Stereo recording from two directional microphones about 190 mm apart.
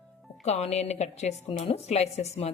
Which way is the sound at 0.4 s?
35° left (ahead or behind).